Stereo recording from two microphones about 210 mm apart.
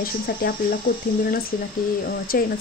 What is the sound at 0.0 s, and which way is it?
Speech, 45° left (ahead or behind).